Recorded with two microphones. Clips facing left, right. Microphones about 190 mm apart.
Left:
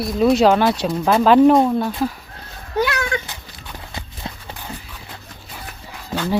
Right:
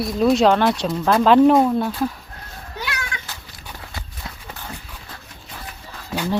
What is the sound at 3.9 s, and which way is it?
Clip-clop, 25° left (ahead or behind).